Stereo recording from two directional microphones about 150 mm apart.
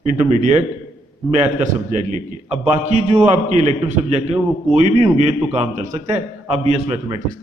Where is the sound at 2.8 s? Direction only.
45° right (ahead or behind).